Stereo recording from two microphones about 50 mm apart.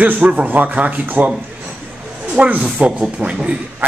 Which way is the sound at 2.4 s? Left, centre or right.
Right.